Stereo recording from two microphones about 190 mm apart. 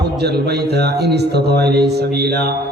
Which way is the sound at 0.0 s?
60° right (ahead or behind).